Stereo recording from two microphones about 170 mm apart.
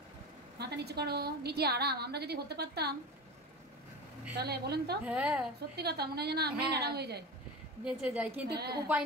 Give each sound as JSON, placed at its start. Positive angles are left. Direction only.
{"t": 0.6, "sound": "a woman's voice", "side_deg": -75}
{"t": 4.4, "sound": "a woman's voice", "side_deg": -70}
{"t": 5.0, "sound": "a woman's voice", "side_deg": -5}
{"t": 5.8, "sound": "a woman's voice", "side_deg": -70}
{"t": 7.8, "sound": "a woman's voice", "side_deg": -5}
{"t": 8.5, "sound": "a woman's voice", "side_deg": -70}